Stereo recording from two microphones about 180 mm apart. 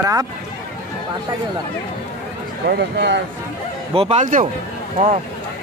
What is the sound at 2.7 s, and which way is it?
Speech, 70° right (ahead or behind).